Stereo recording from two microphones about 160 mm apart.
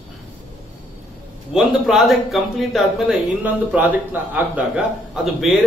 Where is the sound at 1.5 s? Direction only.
Centre (ahead or behind).